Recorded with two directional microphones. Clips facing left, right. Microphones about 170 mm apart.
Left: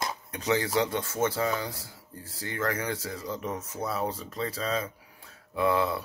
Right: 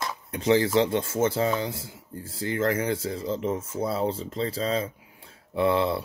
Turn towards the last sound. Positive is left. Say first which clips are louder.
# right 3 dB
turn(degrees=-25)  # may be behind; listen again after turning